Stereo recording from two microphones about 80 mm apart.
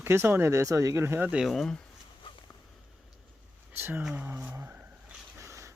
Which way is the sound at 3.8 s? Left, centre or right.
Right.